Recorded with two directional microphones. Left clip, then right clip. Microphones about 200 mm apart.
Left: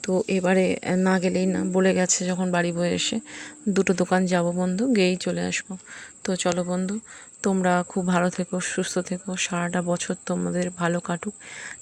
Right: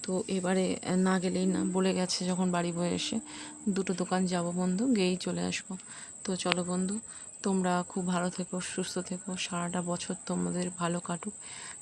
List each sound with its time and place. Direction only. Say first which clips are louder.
0.0 s speech: left 9 dB; 25° left (ahead or behind)
6.2 s speech: left 7 dB; 25° left (ahead or behind)